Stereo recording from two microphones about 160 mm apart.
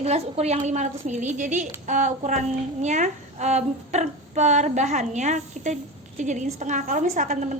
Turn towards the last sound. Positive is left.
turn(degrees=-50)  # may be behind; listen again after turning